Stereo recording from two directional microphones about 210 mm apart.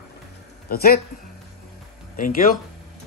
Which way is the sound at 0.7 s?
45° left (ahead or behind).